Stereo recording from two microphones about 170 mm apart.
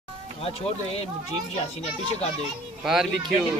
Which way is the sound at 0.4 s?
35° left (ahead or behind).